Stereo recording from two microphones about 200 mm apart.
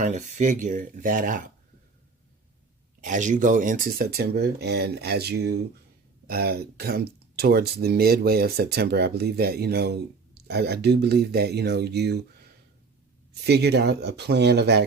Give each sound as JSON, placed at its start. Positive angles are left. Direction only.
{"t": 0.0, "sound": "speech", "side_deg": -40}
{"t": 3.0, "sound": "speech", "side_deg": -40}
{"t": 13.4, "sound": "speech", "side_deg": -55}